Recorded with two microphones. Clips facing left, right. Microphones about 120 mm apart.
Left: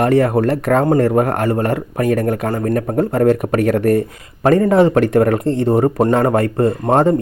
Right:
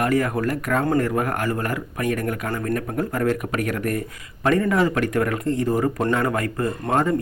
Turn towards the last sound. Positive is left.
turn(degrees=30)  # may be behind; listen again after turning